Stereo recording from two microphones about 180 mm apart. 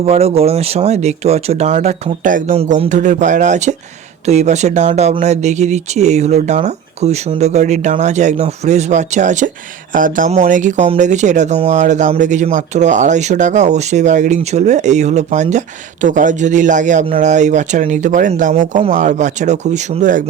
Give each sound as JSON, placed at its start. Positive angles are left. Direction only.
{"t": 0.0, "sound": "speech", "side_deg": -35}